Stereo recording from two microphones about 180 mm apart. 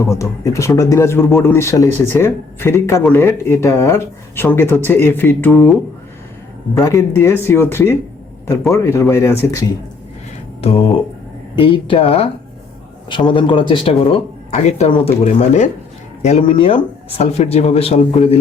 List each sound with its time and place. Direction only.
0.0 s speech: 15° left (ahead or behind)
6.7 s speech: 15° left (ahead or behind)
10.6 s speech: 35° left (ahead or behind)